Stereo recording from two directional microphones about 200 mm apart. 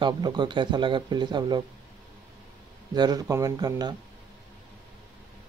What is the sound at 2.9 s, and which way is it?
Speech, 20° right (ahead or behind).